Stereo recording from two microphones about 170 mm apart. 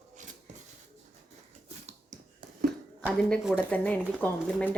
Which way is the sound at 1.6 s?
40° right (ahead or behind).